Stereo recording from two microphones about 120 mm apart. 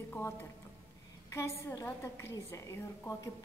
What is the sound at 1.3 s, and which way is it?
A woman's voice, 25° left (ahead or behind).